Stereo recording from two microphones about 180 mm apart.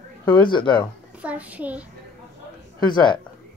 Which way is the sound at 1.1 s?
5° right (ahead or behind).